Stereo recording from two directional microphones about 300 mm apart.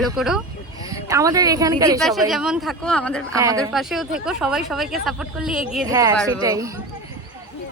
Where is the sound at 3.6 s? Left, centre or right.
Centre.